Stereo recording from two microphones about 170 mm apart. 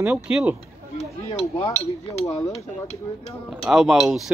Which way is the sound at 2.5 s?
35° left (ahead or behind).